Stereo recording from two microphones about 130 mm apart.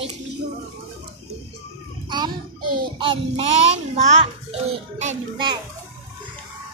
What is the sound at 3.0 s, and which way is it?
Child singing, 40° right (ahead or behind).